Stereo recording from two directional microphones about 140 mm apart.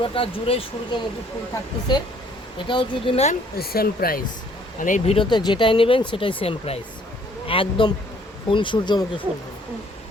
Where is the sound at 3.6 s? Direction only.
90° left.